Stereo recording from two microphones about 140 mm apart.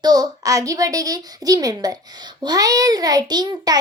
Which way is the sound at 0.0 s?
30° right (ahead or behind).